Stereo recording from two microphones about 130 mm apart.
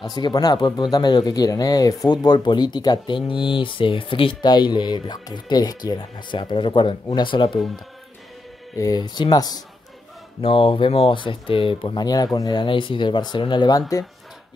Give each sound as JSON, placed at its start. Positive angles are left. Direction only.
{"t": 0.1, "sound": "speech", "side_deg": 30}
{"t": 8.7, "sound": "speech", "side_deg": 30}
{"t": 10.4, "sound": "speech", "side_deg": 45}